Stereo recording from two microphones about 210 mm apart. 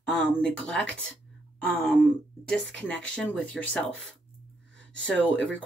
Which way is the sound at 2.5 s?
5° left (ahead or behind).